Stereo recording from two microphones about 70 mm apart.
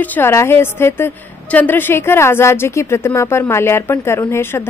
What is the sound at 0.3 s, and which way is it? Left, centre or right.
Speech, left.